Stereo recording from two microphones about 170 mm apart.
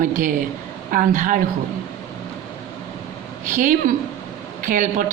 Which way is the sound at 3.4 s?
50° right (ahead or behind).